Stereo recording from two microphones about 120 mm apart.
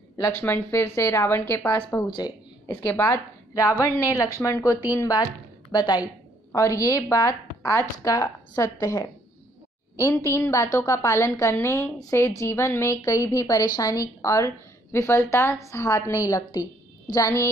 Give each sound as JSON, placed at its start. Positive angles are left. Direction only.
{"t": 0.2, "sound": "a woman's voice", "side_deg": 20}
{"t": 2.0, "sound": "a woman's voice", "side_deg": 40}
{"t": 2.7, "sound": "a woman's voice", "side_deg": 15}
{"t": 10.3, "sound": "a woman's voice", "side_deg": 20}